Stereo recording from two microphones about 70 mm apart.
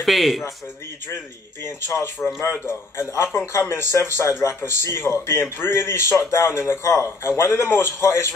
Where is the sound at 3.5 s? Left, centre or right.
Left.